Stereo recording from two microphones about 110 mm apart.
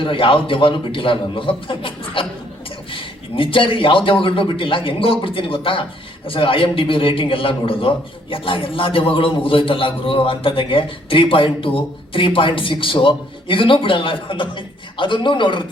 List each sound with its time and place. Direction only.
0.0 s a man's voice: 50° left (ahead or behind)